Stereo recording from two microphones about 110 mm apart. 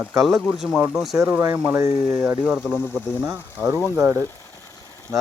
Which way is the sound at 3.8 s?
25° right (ahead or behind).